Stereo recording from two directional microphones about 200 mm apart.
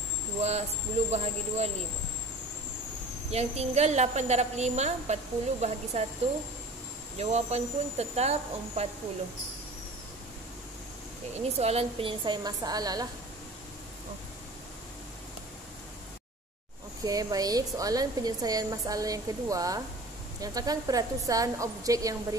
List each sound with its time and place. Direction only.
0.4 s a woman's voice: 30° right (ahead or behind)
3.3 s a woman's voice: 30° right (ahead or behind)
7.2 s a woman's voice: 35° right (ahead or behind)
11.4 s a woman's voice: 30° right (ahead or behind)
17.0 s a woman's voice: 20° right (ahead or behind)